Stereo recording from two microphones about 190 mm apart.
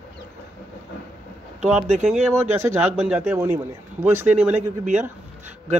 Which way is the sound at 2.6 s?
15° right (ahead or behind).